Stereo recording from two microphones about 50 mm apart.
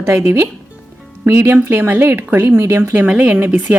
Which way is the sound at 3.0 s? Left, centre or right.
Right.